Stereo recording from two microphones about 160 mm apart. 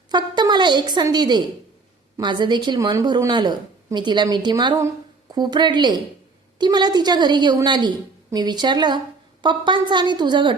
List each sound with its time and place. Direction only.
0.1 s a woman's voice: 25° right (ahead or behind)